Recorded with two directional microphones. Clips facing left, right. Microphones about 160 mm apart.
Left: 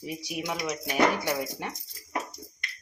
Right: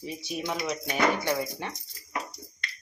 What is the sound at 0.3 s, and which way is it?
Speech, 10° left (ahead or behind).